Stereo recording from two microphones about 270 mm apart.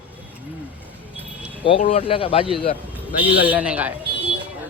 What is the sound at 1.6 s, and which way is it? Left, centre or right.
Speech, centre.